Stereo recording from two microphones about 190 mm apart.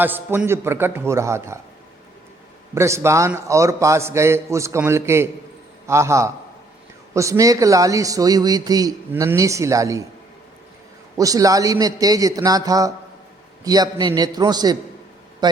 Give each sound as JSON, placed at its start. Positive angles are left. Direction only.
{"t": 0.0, "sound": "speech", "side_deg": -10}
{"t": 2.7, "sound": "speech", "side_deg": -15}
{"t": 11.2, "sound": "a man's voice", "side_deg": -20}